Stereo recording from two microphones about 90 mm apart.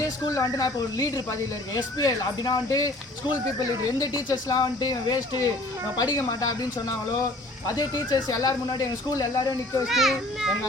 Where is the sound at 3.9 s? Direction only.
45° left (ahead or behind).